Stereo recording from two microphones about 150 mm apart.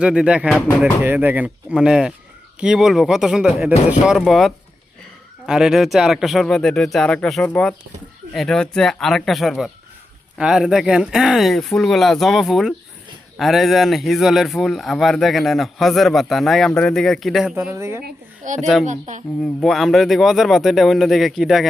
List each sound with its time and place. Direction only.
0.0 s a man's voice: 5° right (ahead or behind)
17.7 s a woman's voice: 20° right (ahead or behind)
18.4 s a child's voice: 55° right (ahead or behind)
19.4 s a man's voice: 5° left (ahead or behind)